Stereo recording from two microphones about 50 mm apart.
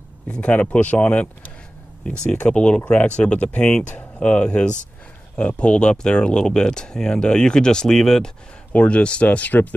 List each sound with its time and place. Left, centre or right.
0.3 s speech: left
8.7 s speech: left